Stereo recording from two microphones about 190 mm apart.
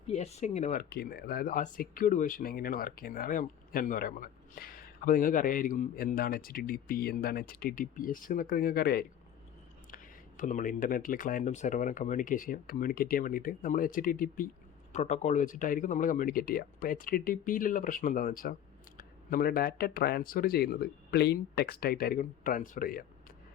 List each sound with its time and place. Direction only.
0.1 s speech: 35° left (ahead or behind); by 9.0 s 50° left (ahead or behind)
9.9 s speech: 40° left (ahead or behind)